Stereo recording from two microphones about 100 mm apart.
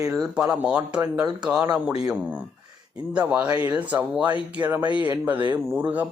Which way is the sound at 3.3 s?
20° right (ahead or behind).